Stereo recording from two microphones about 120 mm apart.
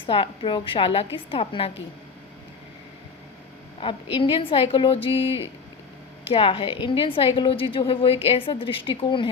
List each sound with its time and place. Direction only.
0.0 s a woman's voice: 45° left (ahead or behind)
3.8 s a woman's voice: 45° left (ahead or behind)
6.2 s a woman's voice: 50° left (ahead or behind)